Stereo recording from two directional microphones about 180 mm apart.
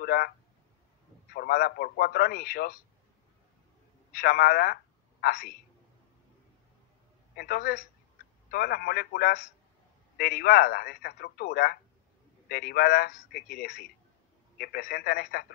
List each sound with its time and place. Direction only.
0.0 s a sound: 55° left (ahead or behind)
1.3 s speech: 60° left (ahead or behind)
4.1 s a woman's voice: 55° left (ahead or behind)
7.3 s speech: 55° left (ahead or behind)